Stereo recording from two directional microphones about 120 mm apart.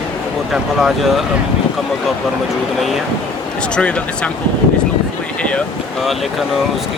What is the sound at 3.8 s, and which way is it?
Speech, 10° left (ahead or behind).